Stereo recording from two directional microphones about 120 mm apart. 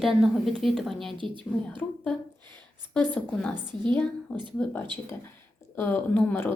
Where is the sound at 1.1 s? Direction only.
45° right (ahead or behind).